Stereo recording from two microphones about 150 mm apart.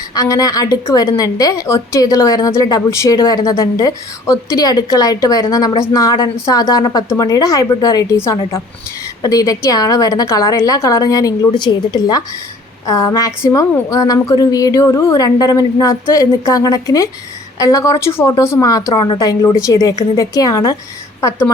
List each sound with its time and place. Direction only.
0.1 s a woman's voice: 25° left (ahead or behind)